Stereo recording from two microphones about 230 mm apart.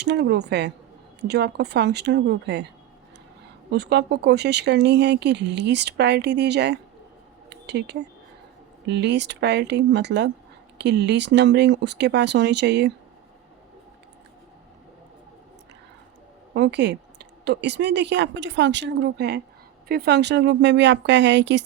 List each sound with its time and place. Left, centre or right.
0.0 s speech: right
3.7 s speech: right
16.6 s speech: right